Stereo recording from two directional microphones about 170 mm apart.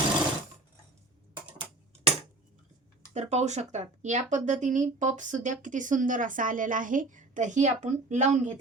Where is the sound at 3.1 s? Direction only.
45° right (ahead or behind).